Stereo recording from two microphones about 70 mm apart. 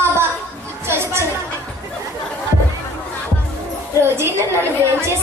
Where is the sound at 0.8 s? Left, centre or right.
Right.